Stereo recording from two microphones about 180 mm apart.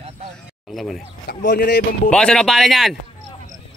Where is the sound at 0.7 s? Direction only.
Centre (ahead or behind).